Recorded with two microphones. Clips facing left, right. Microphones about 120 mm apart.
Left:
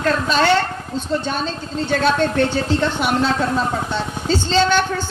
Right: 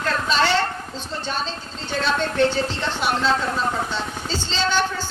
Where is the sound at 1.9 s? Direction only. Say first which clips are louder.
Left 5 dB; 50° left (ahead or behind).